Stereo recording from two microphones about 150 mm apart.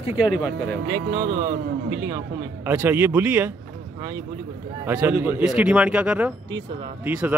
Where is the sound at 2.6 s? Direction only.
15° right (ahead or behind).